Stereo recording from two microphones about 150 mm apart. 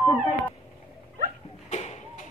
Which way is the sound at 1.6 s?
50° left (ahead or behind).